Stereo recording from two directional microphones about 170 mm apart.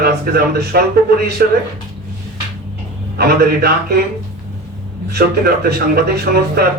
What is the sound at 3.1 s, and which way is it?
Speech, 65° right (ahead or behind).